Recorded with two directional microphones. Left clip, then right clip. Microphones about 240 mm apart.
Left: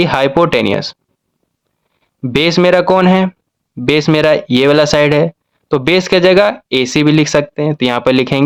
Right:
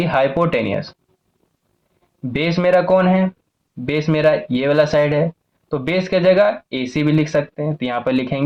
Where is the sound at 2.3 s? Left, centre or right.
Left.